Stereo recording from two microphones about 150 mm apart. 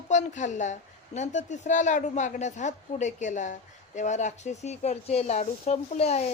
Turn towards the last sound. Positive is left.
turn(degrees=45)  # may be behind; listen again after turning